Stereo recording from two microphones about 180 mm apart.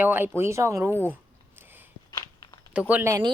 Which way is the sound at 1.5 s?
10° right (ahead or behind).